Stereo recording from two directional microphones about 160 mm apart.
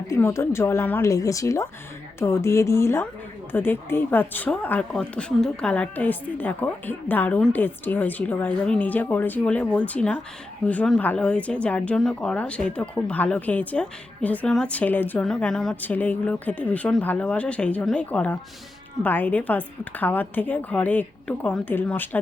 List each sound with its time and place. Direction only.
0.1 s speech: 15° left (ahead or behind)